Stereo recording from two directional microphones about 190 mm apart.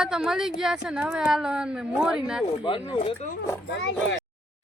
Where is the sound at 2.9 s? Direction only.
35° left (ahead or behind).